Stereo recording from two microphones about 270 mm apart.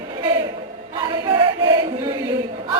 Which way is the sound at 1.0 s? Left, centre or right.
Centre.